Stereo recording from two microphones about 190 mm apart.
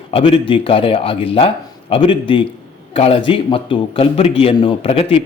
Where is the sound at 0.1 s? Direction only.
30° left (ahead or behind).